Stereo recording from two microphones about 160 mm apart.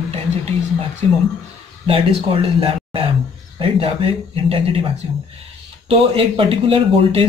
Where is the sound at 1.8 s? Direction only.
35° right (ahead or behind).